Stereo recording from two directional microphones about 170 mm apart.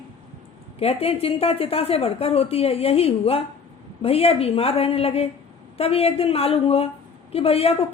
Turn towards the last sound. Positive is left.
turn(degrees=35)  # may be behind; listen again after turning